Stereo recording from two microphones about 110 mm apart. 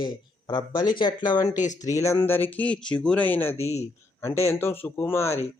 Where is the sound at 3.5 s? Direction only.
80° left.